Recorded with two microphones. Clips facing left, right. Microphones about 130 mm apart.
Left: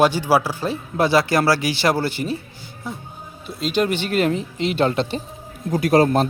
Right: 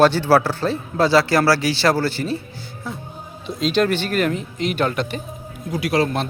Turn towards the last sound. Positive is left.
turn(degrees=40)  # may be behind; listen again after turning